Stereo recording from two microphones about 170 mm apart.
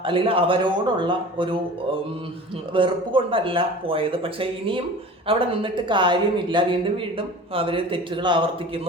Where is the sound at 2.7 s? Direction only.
30° right (ahead or behind).